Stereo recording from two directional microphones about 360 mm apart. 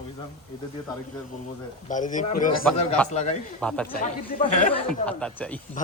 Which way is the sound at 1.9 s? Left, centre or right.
Left.